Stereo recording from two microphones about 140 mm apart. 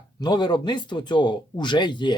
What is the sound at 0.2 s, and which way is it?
Speech, 30° left (ahead or behind).